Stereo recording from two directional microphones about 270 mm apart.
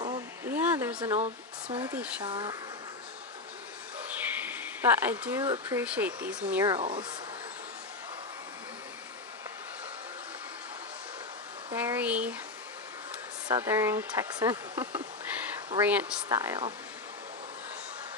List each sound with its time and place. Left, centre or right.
0.0 s a sound: centre
1.1 s speech: right
1.9 s speech: centre
2.2 s speech: centre
4.4 s speech: centre
11.7 s speech: centre
13.5 s speech: centre